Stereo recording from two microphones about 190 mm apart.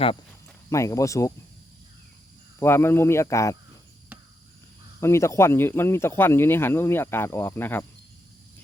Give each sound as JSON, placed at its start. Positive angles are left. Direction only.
{"t": 0.7, "sound": "speech", "side_deg": 15}
{"t": 2.6, "sound": "speech", "side_deg": 10}
{"t": 4.9, "sound": "speech", "side_deg": 15}